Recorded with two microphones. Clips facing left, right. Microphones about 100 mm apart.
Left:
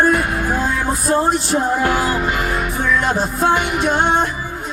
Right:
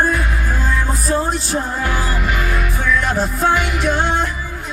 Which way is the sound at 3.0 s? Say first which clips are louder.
Left 1 dB; 20° left (ahead or behind).